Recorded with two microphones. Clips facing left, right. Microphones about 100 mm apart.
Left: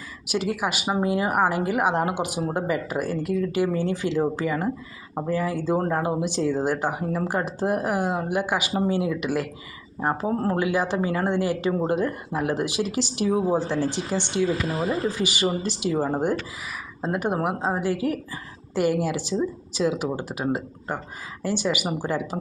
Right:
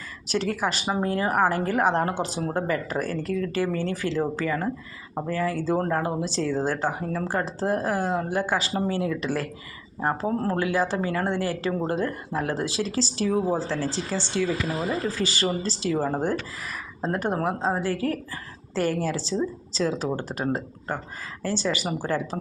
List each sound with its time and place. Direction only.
0.3 s speech: 10° left (ahead or behind)